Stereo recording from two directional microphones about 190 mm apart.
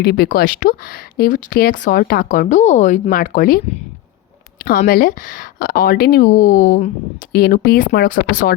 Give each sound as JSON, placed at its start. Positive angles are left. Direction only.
{"t": 0.0, "sound": "speech", "side_deg": 55}
{"t": 4.9, "sound": "speech", "side_deg": 45}